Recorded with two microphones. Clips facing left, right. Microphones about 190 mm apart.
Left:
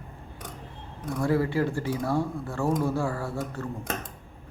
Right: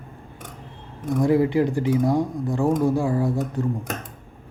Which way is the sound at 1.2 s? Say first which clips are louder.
Right 6 dB; 20° right (ahead or behind).